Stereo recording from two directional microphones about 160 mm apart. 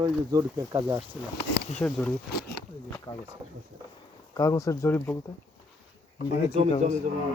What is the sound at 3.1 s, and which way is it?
Speech, 30° left (ahead or behind).